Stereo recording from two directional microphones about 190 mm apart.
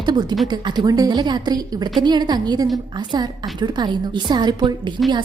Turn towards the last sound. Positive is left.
turn(degrees=-25)  # may be behind; listen again after turning